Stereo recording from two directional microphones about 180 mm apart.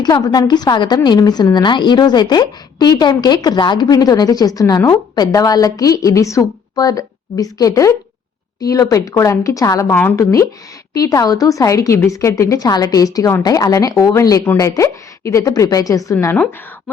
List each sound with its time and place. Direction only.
0.0 s a woman's voice: 20° left (ahead or behind)